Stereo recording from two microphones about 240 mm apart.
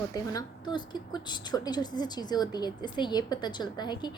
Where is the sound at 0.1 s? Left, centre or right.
Centre.